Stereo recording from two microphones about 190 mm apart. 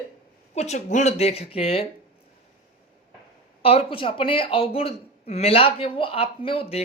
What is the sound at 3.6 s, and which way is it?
Speech, 30° left (ahead or behind).